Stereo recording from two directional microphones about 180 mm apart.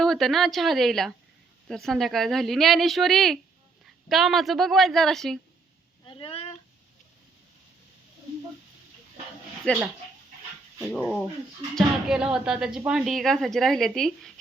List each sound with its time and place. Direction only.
0.0 s a woman's voice: centre (ahead or behind)
6.1 s a sound: 30° left (ahead or behind)
9.7 s a woman's voice: 5° left (ahead or behind)